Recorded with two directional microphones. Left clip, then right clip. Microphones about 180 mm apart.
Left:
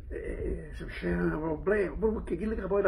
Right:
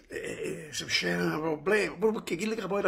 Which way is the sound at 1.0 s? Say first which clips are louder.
Right 2 dB; 35° right (ahead or behind).